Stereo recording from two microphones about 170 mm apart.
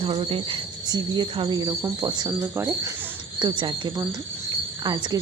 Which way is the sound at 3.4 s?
30° right (ahead or behind).